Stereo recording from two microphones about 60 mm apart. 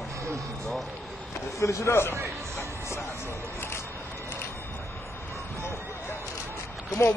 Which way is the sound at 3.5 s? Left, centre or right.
Left.